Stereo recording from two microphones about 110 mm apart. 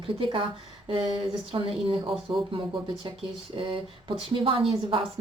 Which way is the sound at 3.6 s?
50° right (ahead or behind).